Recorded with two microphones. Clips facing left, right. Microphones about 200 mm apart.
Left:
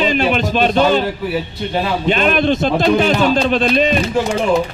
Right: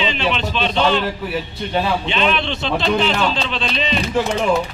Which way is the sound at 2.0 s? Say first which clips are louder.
Left 6 dB; 45° left (ahead or behind).